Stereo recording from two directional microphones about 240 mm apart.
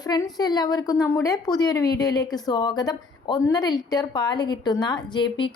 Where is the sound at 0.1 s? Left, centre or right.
Centre.